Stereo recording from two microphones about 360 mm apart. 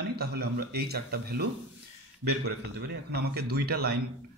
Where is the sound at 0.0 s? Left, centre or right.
Right.